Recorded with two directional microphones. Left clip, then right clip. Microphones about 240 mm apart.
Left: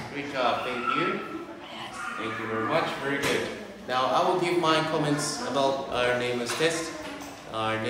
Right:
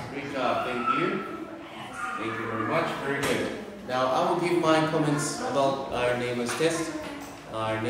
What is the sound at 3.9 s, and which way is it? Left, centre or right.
A man's voice, centre.